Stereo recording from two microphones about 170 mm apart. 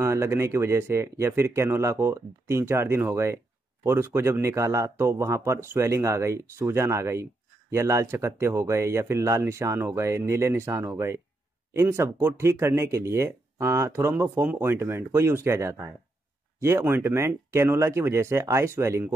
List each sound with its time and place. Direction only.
0.0 s speech: 15° right (ahead or behind)